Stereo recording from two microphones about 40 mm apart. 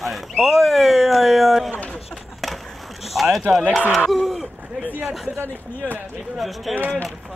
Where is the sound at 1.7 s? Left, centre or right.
Left.